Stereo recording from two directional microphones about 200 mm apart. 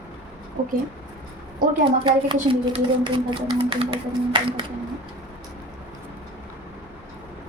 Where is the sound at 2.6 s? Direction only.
25° right (ahead or behind).